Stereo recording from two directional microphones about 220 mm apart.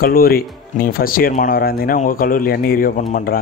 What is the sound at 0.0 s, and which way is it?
Speech, 40° left (ahead or behind).